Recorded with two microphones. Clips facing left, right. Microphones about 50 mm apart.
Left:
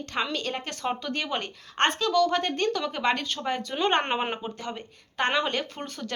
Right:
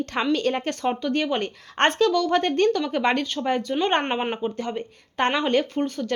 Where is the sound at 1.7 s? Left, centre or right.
Right.